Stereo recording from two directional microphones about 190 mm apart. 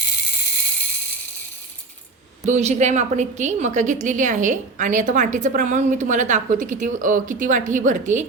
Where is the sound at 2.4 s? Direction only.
35° right (ahead or behind).